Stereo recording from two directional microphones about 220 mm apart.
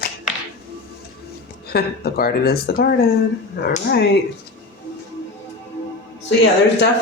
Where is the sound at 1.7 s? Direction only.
45° left (ahead or behind).